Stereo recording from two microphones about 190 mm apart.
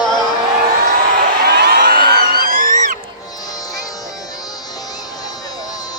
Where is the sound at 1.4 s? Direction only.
60° right (ahead or behind); by 3.0 s 40° right (ahead or behind).